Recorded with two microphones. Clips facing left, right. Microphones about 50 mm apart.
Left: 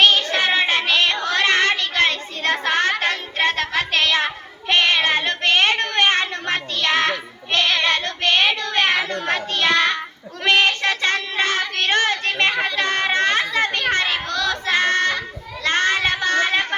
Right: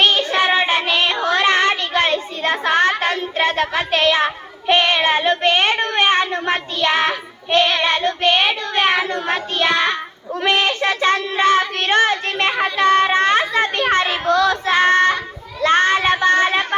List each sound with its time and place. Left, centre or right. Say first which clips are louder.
0.0 s child singing: right 1 dB; centre
4.6 s a child's voice: right 2 dB; centre